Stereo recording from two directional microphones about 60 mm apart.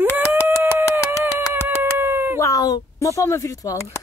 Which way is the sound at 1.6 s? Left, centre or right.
Right.